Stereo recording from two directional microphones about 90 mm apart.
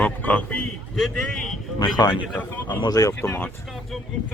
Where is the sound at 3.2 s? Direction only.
25° left (ahead or behind).